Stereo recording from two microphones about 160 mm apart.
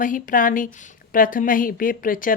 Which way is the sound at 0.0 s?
55° left (ahead or behind).